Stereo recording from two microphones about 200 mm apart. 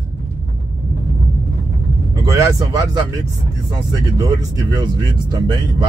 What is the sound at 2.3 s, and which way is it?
Speech, 15° right (ahead or behind).